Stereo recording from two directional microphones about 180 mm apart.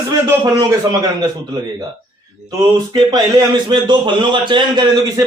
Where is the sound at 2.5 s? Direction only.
20° right (ahead or behind).